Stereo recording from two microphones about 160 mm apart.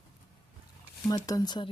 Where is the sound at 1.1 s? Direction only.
25° left (ahead or behind).